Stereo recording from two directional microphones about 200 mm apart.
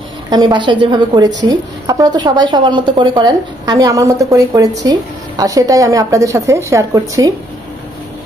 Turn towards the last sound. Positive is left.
turn(degrees=-15)  # may be behind; listen again after turning